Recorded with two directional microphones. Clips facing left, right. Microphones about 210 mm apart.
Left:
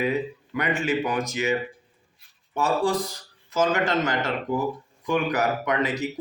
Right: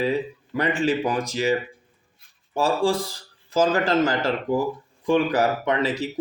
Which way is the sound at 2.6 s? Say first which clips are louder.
Right 2 dB; 30° right (ahead or behind).